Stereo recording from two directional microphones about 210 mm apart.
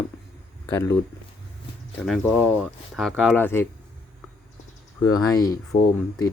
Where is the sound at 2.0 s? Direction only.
Centre (ahead or behind).